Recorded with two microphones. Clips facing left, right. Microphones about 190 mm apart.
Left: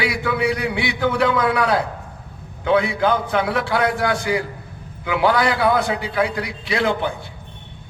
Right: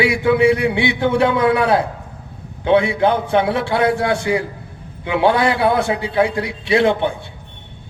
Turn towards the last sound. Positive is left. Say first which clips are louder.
# right 5 dB
turn(degrees=-25)  # may be behind; listen again after turning